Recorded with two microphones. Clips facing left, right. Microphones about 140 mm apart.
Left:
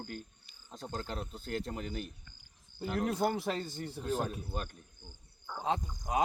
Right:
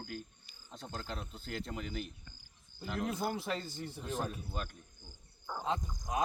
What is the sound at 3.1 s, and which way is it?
Speech, 60° left (ahead or behind).